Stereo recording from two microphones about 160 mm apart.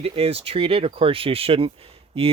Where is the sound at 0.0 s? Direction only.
40° right (ahead or behind).